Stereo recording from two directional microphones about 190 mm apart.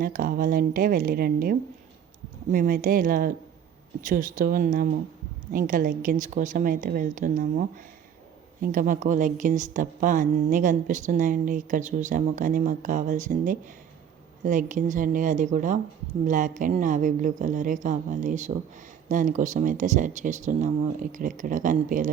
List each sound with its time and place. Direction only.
0.0 s a woman's voice: 50° right (ahead or behind)